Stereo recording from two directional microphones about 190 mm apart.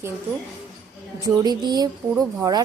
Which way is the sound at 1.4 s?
20° right (ahead or behind).